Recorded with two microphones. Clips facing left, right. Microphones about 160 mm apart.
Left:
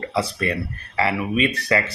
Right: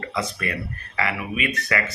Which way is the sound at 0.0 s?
30° left (ahead or behind).